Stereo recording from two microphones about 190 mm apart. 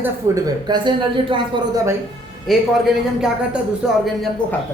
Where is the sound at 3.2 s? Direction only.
5° right (ahead or behind).